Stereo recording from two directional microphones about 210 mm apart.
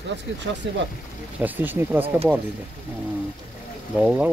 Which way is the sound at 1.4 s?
10° right (ahead or behind).